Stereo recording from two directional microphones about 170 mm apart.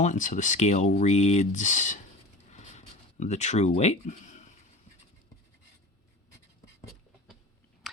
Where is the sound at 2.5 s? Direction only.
45° left (ahead or behind).